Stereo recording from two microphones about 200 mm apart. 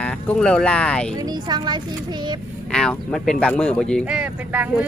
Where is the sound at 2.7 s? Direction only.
5° left (ahead or behind).